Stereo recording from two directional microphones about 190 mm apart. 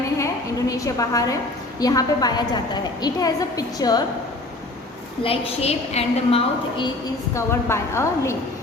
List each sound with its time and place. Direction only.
0.7 s a woman's voice: 15° left (ahead or behind)
5.2 s a woman's voice: 30° left (ahead or behind)
7.3 s a woman's voice: 15° left (ahead or behind)